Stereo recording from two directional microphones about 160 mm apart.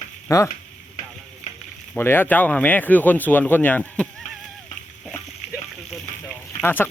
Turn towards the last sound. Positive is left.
turn(degrees=15)  # may be behind; listen again after turning